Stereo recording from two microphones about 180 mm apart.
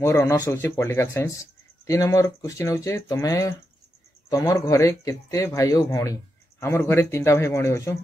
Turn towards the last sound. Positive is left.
turn(degrees=15)  # may be behind; listen again after turning